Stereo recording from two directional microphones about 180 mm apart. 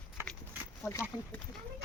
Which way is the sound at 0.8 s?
15° left (ahead or behind).